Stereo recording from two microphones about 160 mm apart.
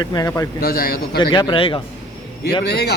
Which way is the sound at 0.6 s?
65° left (ahead or behind).